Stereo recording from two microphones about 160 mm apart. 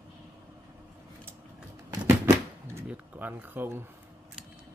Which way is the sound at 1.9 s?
15° right (ahead or behind).